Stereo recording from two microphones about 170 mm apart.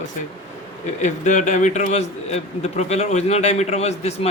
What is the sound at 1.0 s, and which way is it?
A man's voice, 45° left (ahead or behind).